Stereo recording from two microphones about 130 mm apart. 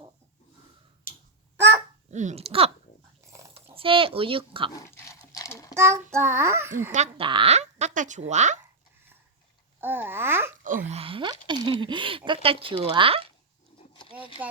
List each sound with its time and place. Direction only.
2.0 s speech: 65° right (ahead or behind); by 2.7 s 50° right (ahead or behind)
3.2 s a sound: 20° right (ahead or behind)
3.5 s speech: 45° right (ahead or behind)
4.7 s dog: 25° left (ahead or behind)
5.7 s a child's voice: 20° right (ahead or behind)
7.2 s speech: 40° right (ahead or behind)
7.5 s speech: 60° right (ahead or behind)
9.8 s speech: 15° right (ahead or behind)
10.8 s speech: 50° right (ahead or behind)
14.4 s speech: 15° right (ahead or behind)